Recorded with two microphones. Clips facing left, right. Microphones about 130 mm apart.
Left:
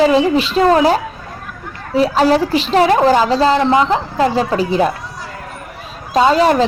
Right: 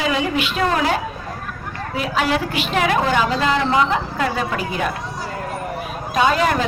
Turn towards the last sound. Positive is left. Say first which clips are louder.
# left 6 dB
turn(degrees=30)  # may be behind; listen again after turning